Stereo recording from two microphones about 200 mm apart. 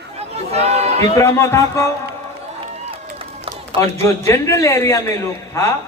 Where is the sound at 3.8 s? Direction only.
15° left (ahead or behind).